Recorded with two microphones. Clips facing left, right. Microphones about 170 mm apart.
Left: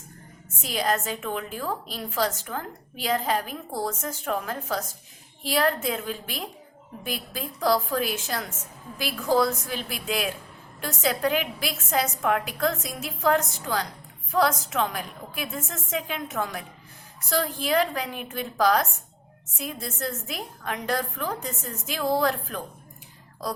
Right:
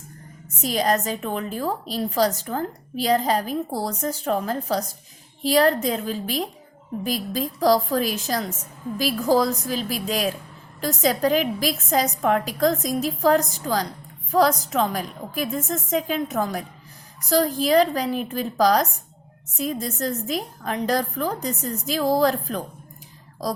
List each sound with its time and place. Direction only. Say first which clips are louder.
0.6 s a woman's voice: right 5 dB; 40° right (ahead or behind)